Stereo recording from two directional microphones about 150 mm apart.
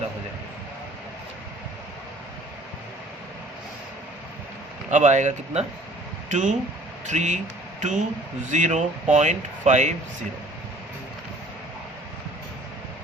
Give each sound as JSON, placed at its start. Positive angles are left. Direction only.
{"t": 4.9, "sound": "speech", "side_deg": -55}